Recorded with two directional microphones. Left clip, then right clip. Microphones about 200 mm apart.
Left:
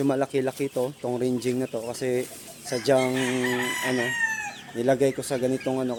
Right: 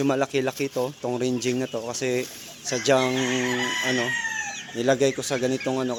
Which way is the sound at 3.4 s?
25° right (ahead or behind).